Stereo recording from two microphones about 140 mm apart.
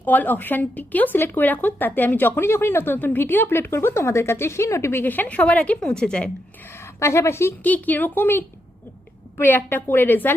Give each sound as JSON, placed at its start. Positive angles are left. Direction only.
{"t": 0.0, "sound": "a woman's voice", "side_deg": 10}
{"t": 6.7, "sound": "a woman's voice", "side_deg": 20}